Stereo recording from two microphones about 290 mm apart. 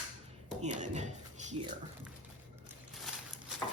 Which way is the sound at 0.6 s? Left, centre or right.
Right.